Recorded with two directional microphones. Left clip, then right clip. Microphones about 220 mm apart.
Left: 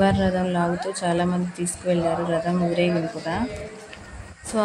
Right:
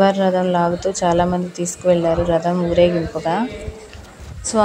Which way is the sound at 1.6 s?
45° right (ahead or behind).